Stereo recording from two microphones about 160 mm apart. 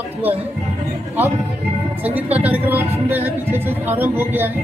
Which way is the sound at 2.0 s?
10° right (ahead or behind).